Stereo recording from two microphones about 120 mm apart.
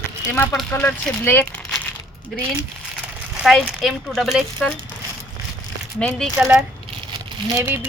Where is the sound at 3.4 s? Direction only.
Centre (ahead or behind).